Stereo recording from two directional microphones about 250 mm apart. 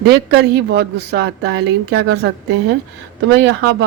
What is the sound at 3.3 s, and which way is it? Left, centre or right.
Speech, right.